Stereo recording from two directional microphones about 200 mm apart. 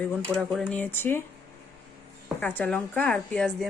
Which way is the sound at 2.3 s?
10° left (ahead or behind).